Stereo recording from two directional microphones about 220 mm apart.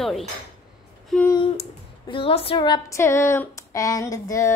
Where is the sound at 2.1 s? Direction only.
25° left (ahead or behind).